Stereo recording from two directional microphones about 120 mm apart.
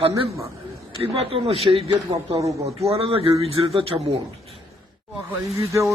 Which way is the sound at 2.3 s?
25° right (ahead or behind).